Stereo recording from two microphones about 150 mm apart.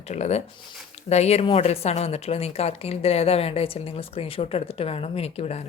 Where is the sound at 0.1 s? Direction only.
45° left (ahead or behind).